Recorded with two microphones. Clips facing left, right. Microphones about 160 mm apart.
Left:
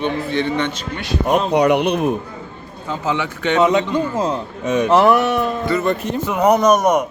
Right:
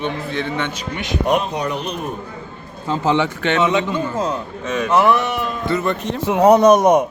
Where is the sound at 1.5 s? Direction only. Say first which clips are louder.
Left 9 dB; 70° left (ahead or behind).